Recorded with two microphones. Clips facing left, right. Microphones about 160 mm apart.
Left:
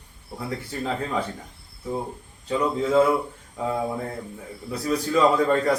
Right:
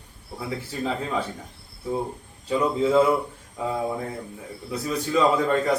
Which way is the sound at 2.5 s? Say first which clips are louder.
Right 1 dB; 10° right (ahead or behind).